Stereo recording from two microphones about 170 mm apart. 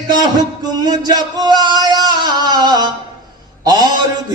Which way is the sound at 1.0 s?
25° right (ahead or behind).